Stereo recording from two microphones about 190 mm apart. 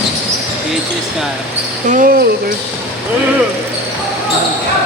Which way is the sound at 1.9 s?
45° right (ahead or behind).